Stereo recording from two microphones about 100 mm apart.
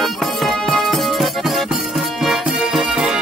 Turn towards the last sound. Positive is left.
turn(degrees=-10)  # may be behind; listen again after turning